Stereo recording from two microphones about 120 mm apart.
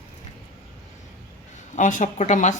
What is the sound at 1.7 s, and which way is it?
Speech, 90° left.